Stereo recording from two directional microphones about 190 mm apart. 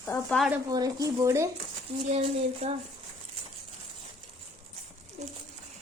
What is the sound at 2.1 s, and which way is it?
Speech, 30° right (ahead or behind).